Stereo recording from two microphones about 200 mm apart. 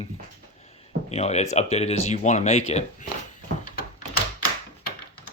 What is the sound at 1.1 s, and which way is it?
Speech, 35° left (ahead or behind).